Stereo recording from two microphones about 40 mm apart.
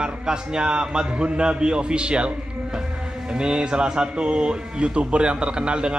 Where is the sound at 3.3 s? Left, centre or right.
Right.